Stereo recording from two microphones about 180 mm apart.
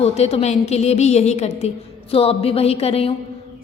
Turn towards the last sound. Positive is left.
turn(degrees=35)  # may be behind; listen again after turning